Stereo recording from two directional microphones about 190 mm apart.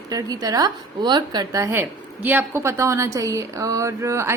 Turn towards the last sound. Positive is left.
turn(degrees=-15)  # may be behind; listen again after turning